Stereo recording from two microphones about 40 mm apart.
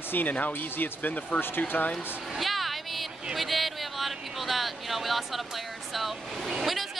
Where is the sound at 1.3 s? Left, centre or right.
Left.